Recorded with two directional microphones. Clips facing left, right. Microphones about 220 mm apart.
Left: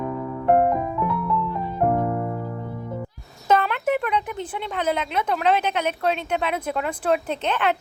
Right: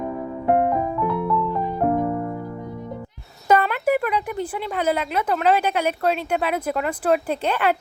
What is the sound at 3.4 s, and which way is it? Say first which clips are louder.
Speech: right 2 dB; 10° right (ahead or behind).